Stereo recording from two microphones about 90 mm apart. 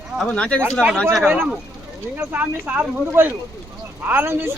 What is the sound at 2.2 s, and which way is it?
Speech, 20° right (ahead or behind).